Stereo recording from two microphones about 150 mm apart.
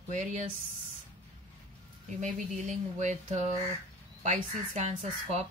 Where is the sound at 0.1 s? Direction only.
55° right (ahead or behind).